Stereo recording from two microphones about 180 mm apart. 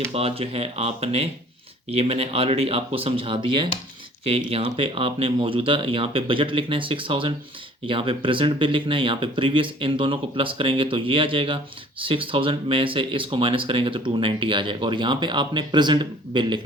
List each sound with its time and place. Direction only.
0.1 s speech: 35° right (ahead or behind)